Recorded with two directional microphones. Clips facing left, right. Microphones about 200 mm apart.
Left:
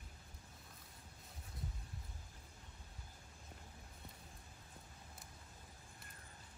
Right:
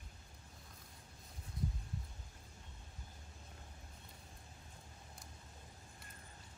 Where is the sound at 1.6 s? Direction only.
Centre (ahead or behind).